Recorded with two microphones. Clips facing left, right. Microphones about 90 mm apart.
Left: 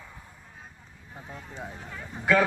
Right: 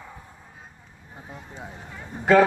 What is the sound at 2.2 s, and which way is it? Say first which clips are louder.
Speech: right 6 dB; 50° right (ahead or behind).